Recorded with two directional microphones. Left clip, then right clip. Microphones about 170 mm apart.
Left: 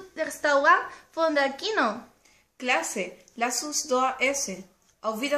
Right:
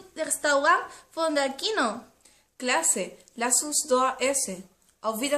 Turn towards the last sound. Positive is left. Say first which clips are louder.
# even
turn(degrees=-20)  # may be behind; listen again after turning